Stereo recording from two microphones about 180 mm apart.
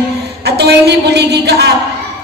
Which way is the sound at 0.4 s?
65° right (ahead or behind).